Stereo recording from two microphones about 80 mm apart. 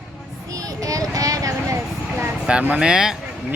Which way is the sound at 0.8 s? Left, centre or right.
Right.